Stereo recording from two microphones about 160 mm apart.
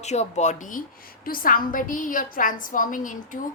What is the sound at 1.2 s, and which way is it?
A woman's voice, 60° left (ahead or behind).